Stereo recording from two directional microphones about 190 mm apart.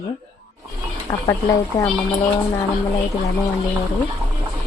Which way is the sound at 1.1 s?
20° left (ahead or behind).